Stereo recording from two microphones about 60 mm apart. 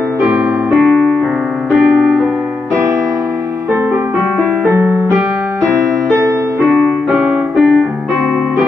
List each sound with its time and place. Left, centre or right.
0.2 s keyboard: centre
4.6 s music: right
7.1 s music: centre